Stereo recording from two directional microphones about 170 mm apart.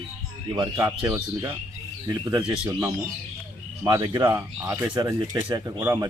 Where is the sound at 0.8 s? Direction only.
20° right (ahead or behind).